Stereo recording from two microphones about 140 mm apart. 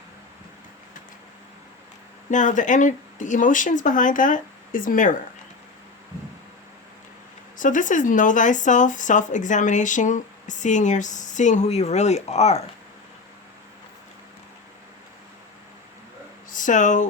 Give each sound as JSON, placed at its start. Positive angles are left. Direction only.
{"t": 2.3, "sound": "speech", "side_deg": 65}
{"t": 7.6, "sound": "speech", "side_deg": 65}
{"t": 16.5, "sound": "speech", "side_deg": 65}